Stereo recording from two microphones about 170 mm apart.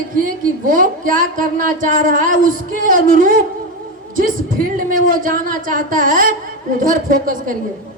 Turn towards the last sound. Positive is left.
turn(degrees=-55)  # may be behind; listen again after turning